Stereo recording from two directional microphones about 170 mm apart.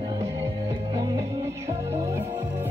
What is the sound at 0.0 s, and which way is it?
Music, 20° right (ahead or behind).